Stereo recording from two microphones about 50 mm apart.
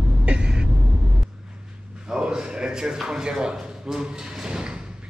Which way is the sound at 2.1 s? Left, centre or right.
Centre.